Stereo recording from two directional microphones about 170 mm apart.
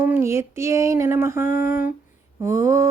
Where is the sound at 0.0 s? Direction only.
15° right (ahead or behind).